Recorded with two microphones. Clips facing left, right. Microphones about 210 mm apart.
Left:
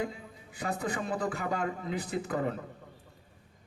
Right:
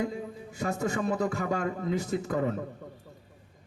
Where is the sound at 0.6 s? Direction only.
45° right (ahead or behind).